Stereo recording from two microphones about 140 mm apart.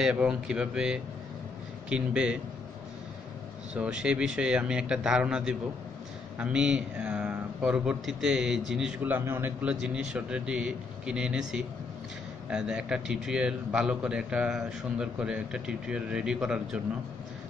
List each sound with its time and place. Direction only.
0.0 s a man's voice: 5° right (ahead or behind)
3.7 s a man's voice: 5° right (ahead or behind)